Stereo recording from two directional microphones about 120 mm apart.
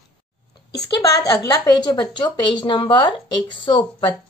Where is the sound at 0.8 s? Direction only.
30° left (ahead or behind); by 4.1 s 45° left (ahead or behind).